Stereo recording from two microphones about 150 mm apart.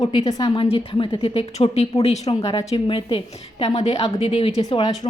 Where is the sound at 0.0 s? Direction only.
30° left (ahead or behind).